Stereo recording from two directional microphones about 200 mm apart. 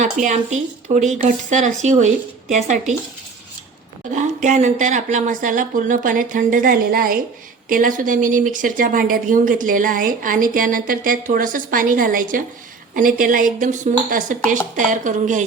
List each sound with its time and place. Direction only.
0.0 s speech: 35° right (ahead or behind)
4.1 s speech: 40° right (ahead or behind)